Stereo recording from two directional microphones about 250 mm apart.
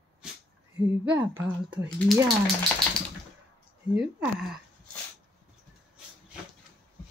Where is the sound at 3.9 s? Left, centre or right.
Centre.